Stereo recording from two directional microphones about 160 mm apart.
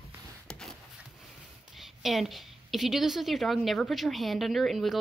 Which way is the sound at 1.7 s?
Centre (ahead or behind).